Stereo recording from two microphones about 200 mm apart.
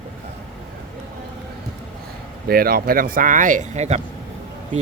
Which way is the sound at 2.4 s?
50° right (ahead or behind).